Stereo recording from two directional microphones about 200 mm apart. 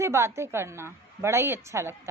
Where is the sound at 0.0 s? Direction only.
15° right (ahead or behind).